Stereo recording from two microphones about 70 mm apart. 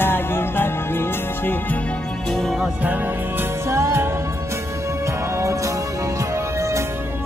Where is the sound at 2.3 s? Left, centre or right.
Centre.